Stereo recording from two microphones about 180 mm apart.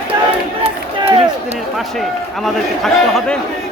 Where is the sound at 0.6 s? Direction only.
30° right (ahead or behind).